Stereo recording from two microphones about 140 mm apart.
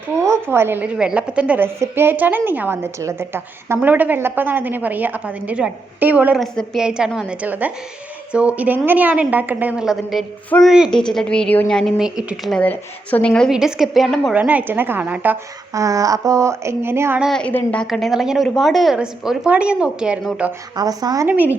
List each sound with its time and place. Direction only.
0.2 s a woman's voice: 20° right (ahead or behind); by 14.3 s centre (ahead or behind)
14.3 s a woman's voice: 10° right (ahead or behind)
15.7 s speech: 25° right (ahead or behind)
17.2 s a woman's voice: centre (ahead or behind)
20.7 s speech: 30° right (ahead or behind)
21.2 s a woman's voice: 10° right (ahead or behind)